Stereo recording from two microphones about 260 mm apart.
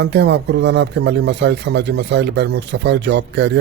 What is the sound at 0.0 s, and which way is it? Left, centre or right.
Speech, right.